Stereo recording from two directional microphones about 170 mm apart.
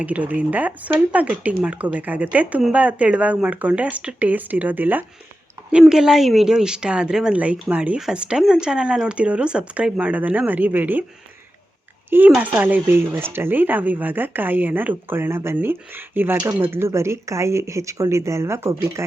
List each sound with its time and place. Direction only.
0.0 s speech: 10° right (ahead or behind)
12.4 s speech: 10° right (ahead or behind)